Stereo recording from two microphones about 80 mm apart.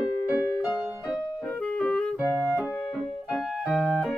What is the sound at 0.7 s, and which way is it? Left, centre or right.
Music, centre.